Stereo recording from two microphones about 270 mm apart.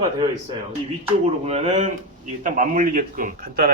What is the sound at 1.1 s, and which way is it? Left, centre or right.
Speech, right.